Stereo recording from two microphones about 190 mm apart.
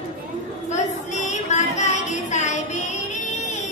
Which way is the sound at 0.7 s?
40° left (ahead or behind).